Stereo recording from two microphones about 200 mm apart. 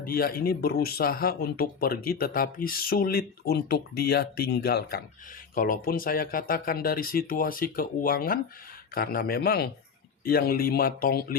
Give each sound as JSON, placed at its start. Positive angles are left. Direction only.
{"t": 0.0, "sound": "speech", "side_deg": 45}